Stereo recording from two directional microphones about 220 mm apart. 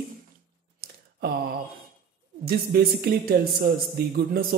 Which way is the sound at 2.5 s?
45° right (ahead or behind).